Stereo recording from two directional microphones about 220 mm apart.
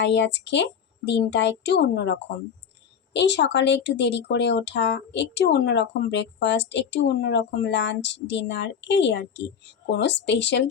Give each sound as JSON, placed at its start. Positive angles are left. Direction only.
{"t": 0.0, "sound": "speech", "side_deg": 55}